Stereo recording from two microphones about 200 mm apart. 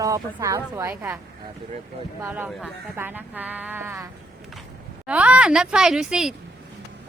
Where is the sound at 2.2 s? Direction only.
10° right (ahead or behind).